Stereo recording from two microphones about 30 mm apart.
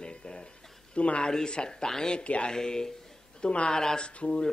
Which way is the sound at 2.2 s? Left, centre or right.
Left.